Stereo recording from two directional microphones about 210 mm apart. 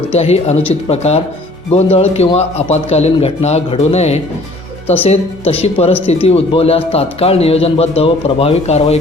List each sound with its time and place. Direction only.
0.1 s a man's voice: 30° left (ahead or behind)